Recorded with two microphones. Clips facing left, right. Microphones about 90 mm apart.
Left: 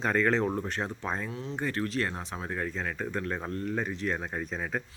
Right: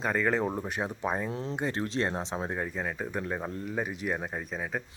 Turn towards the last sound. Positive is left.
turn(degrees=-5)  # may be behind; listen again after turning